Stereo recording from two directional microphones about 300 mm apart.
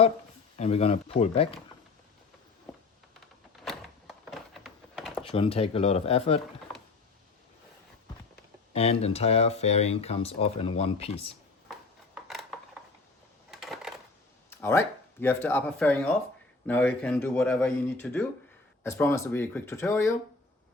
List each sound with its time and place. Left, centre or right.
0.5 s speech: left
3.6 s a sound: centre
5.2 s speech: centre
8.7 s speech: centre
12.3 s cutlery: centre
13.5 s coin: centre
14.5 s speech: centre